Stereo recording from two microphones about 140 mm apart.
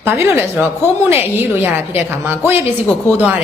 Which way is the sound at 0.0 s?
15° right (ahead or behind).